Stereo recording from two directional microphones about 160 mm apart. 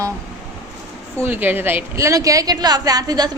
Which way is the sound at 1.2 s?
10° right (ahead or behind).